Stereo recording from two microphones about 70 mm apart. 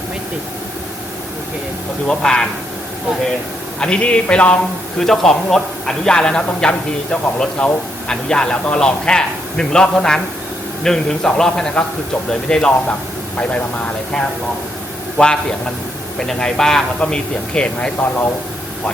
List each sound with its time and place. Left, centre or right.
2.0 s a man's voice: centre
3.8 s a man's voice: centre